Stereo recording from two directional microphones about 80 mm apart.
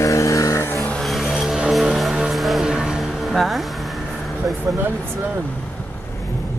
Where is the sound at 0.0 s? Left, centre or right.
Left.